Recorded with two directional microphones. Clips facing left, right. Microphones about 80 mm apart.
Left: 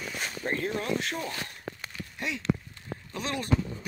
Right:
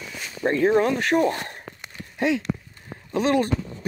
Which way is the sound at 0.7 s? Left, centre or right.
Right.